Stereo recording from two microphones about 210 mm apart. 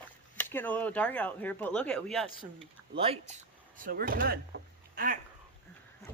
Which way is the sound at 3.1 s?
30° right (ahead or behind).